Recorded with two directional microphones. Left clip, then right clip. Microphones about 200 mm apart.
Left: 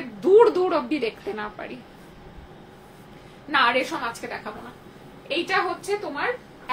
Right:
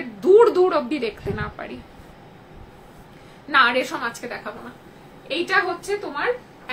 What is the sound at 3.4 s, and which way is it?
A woman's voice, 20° right (ahead or behind).